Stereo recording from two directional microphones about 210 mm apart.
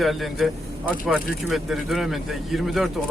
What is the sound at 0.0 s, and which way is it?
Speech, centre (ahead or behind).